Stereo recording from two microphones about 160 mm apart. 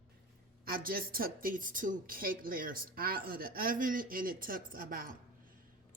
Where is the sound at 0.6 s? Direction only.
65° right (ahead or behind).